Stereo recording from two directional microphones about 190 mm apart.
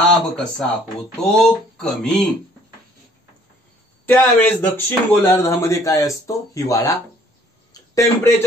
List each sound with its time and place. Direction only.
0.1 s speech: 5° left (ahead or behind)
4.0 s a man's voice: 10° left (ahead or behind)